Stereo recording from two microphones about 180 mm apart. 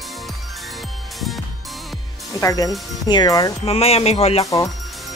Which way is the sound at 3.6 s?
35° left (ahead or behind).